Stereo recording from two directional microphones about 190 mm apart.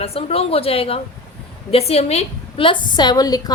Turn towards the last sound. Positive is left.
turn(degrees=20)  # may be behind; listen again after turning